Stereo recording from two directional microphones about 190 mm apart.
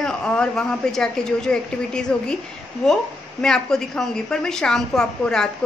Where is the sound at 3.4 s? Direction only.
5° left (ahead or behind).